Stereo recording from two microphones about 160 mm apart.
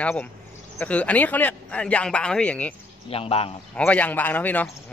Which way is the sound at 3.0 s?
35° left (ahead or behind).